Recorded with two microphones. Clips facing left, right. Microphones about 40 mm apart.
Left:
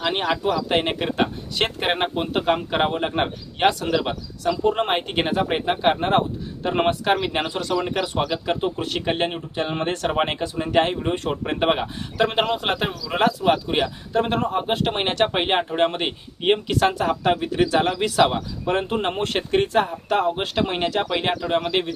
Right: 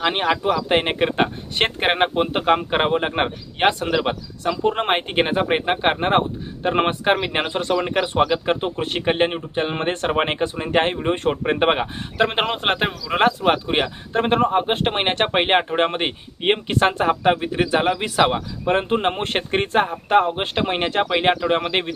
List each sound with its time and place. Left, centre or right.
0.0 s speech: right